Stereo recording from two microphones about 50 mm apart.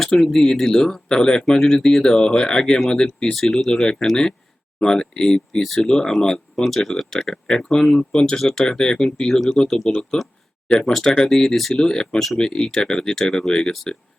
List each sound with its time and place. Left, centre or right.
0.0 s speech: centre
11.3 s speech: centre